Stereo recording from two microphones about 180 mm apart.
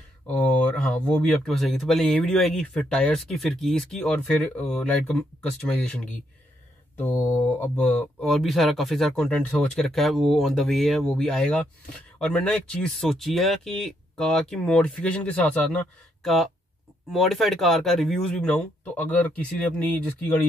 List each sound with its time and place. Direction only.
0.3 s speech: 5° left (ahead or behind)